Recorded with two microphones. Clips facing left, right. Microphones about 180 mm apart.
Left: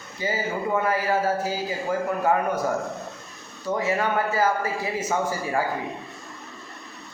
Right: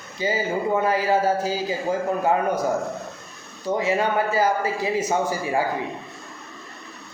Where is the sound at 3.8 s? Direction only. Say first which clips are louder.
Right 2 dB; 15° right (ahead or behind).